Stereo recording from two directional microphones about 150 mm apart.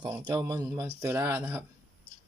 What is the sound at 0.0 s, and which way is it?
Speech, 25° right (ahead or behind).